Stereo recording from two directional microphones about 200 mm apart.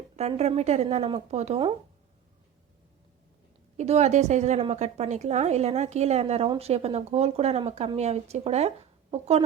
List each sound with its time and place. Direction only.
0.2 s speech: 30° right (ahead or behind)
3.8 s speech: 35° right (ahead or behind)